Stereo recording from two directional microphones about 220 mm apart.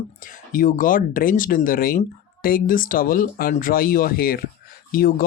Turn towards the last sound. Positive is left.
turn(degrees=40)  # may be behind; listen again after turning